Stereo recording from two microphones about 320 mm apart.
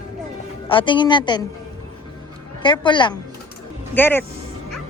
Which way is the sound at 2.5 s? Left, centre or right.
Centre.